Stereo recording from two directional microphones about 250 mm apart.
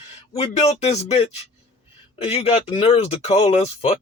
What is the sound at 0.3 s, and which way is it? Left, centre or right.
Speech, left.